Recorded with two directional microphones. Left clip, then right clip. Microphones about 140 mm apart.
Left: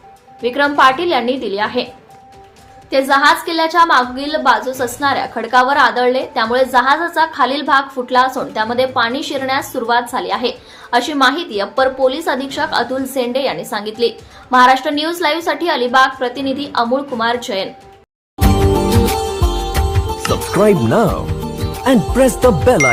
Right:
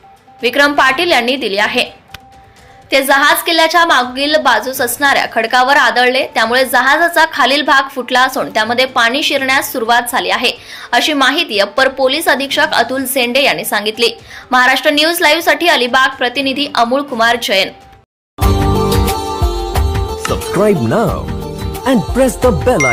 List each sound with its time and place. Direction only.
0.4 s a woman's voice: 15° right (ahead or behind)
2.9 s a woman's voice: 15° right (ahead or behind)
19.9 s speech: centre (ahead or behind)
21.8 s music: centre (ahead or behind)